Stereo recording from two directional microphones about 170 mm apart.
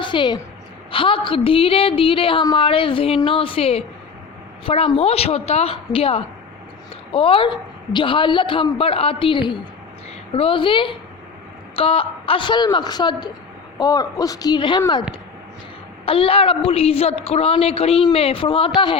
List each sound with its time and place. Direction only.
0.0 s a woman's voice: 30° left (ahead or behind)
16.0 s a woman's voice: 35° left (ahead or behind)